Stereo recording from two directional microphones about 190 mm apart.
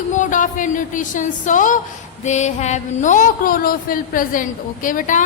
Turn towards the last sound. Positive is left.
turn(degrees=45)  # may be behind; listen again after turning